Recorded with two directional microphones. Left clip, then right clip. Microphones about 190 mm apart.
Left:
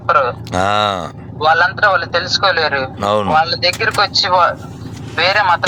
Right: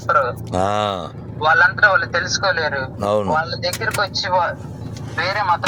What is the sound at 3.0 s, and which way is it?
Speech, centre (ahead or behind).